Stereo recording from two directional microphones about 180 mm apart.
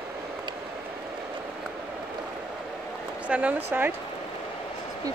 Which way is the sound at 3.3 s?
10° right (ahead or behind).